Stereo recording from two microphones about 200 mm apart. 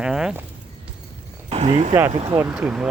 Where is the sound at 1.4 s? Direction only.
30° right (ahead or behind).